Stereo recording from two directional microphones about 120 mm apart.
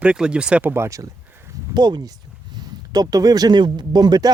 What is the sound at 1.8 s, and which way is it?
Speech, 35° right (ahead or behind).